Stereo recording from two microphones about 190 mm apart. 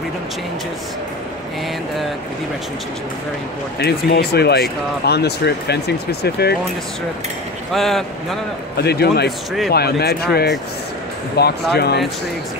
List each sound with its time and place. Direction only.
3.8 s speech: 60° left (ahead or behind)
7.7 s speech: centre (ahead or behind)
8.7 s speech: 55° left (ahead or behind)